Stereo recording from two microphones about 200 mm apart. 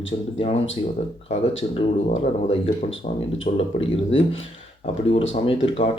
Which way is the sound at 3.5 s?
30° left (ahead or behind).